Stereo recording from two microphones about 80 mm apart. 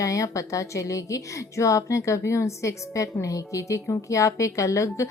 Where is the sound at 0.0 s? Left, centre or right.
Left.